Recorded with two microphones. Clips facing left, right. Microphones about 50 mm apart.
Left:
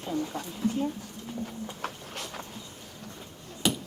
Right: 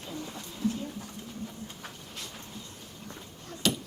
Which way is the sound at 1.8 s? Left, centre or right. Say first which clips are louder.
Left 6 dB; left.